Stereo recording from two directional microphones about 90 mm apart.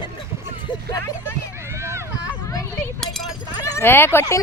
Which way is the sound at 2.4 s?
35° left (ahead or behind).